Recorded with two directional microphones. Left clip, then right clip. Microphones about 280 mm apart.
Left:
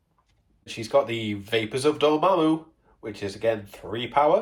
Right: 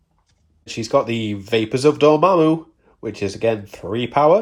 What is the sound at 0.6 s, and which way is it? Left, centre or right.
Speech, centre.